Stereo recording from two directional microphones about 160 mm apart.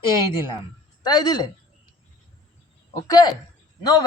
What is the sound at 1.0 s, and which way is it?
Speech, 25° left (ahead or behind).